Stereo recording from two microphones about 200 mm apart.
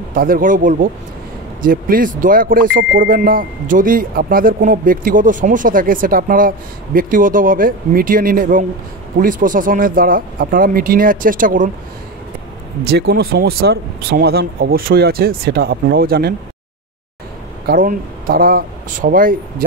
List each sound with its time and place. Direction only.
0.1 s speech: 45° right (ahead or behind)
12.8 s speech: 50° right (ahead or behind)
17.6 s speech: 45° right (ahead or behind)